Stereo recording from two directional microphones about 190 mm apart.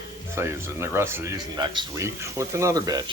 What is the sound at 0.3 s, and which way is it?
Speech, 15° right (ahead or behind).